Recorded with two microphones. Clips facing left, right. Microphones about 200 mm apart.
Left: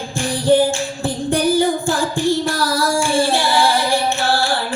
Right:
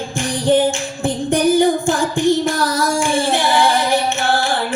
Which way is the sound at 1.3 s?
20° right (ahead or behind).